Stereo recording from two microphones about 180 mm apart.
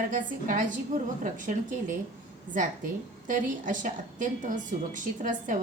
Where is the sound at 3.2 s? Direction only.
45° right (ahead or behind).